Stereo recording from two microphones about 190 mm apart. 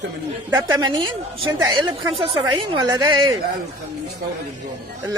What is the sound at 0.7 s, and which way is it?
Speech, 20° right (ahead or behind).